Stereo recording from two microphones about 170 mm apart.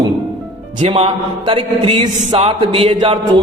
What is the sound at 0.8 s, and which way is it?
A man's voice, 30° right (ahead or behind).